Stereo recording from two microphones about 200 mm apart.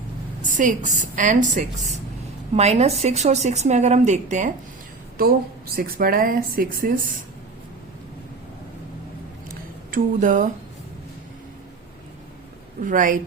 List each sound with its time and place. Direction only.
0.4 s speech: 40° right (ahead or behind)
9.9 s speech: 40° right (ahead or behind)
12.8 s speech: 40° right (ahead or behind)